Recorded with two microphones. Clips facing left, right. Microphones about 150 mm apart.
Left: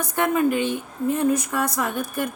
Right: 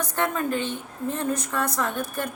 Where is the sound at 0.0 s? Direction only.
10° left (ahead or behind).